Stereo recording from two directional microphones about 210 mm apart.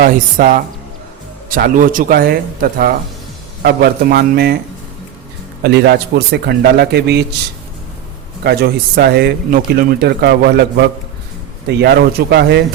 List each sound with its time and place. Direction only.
0.0 s speech: 40° right (ahead or behind)
5.6 s speech: 50° right (ahead or behind)
8.4 s speech: 50° right (ahead or behind)